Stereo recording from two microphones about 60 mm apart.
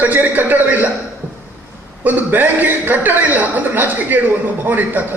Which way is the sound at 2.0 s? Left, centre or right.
Right.